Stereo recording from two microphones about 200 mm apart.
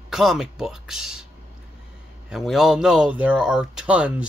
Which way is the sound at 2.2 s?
Centre (ahead or behind).